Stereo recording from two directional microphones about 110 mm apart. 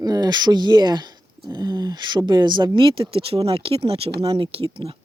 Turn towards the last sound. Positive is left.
turn(degrees=-55)  # may be behind; listen again after turning